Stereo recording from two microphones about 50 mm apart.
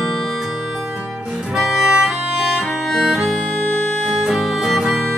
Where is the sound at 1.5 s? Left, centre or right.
Centre.